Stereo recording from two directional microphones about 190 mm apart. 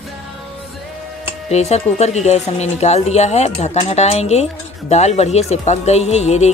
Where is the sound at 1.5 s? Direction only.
35° left (ahead or behind).